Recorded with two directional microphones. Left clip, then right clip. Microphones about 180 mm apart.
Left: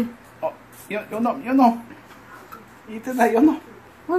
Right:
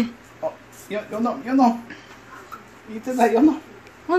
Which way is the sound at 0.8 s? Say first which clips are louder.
Left 1 dB; 15° right (ahead or behind).